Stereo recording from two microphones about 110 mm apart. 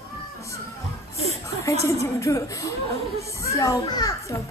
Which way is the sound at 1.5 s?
30° left (ahead or behind).